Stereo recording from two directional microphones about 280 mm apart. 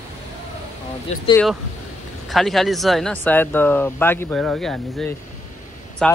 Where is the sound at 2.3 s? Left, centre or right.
Centre.